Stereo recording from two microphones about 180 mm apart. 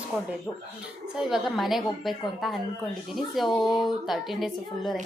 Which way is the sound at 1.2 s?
Centre (ahead or behind).